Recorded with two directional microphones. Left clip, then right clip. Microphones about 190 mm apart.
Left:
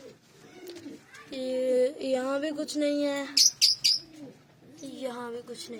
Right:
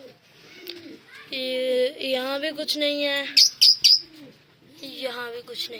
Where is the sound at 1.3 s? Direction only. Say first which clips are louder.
Right 3 dB; 30° left (ahead or behind).